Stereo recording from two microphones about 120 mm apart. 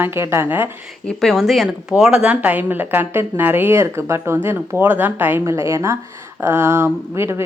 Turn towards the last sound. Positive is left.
turn(degrees=-20)  # may be behind; listen again after turning